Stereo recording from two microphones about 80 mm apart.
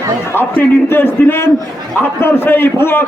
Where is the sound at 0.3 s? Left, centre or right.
Left.